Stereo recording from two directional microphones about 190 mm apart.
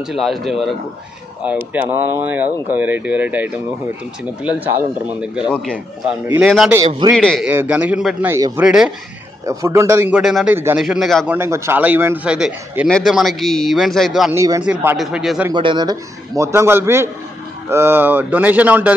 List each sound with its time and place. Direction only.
0.1 s a man's voice: centre (ahead or behind)
6.4 s a man's voice: centre (ahead or behind)
7.4 s a man's voice: 10° right (ahead or behind)
8.3 s a man's voice: 15° right (ahead or behind)
8.6 s a man's voice: 5° right (ahead or behind)
9.5 s a man's voice: 15° right (ahead or behind); by 11.3 s centre (ahead or behind)
11.3 s a man's voice: 15° right (ahead or behind)
14.3 s a man's voice: 20° right (ahead or behind)
15.5 s a man's voice: 25° right (ahead or behind); by 18.9 s 10° right (ahead or behind)